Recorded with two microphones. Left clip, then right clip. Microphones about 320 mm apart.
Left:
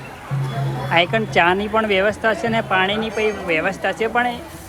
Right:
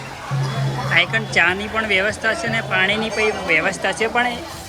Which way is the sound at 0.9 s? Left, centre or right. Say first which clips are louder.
Even; centre.